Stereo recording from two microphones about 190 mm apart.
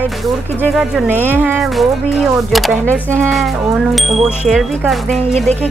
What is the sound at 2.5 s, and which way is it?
Speech, centre (ahead or behind).